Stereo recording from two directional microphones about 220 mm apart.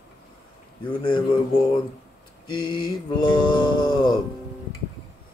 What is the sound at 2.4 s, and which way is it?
Mantra, 20° left (ahead or behind).